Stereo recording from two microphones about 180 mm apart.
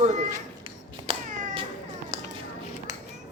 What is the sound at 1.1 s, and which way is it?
Cat, 30° right (ahead or behind).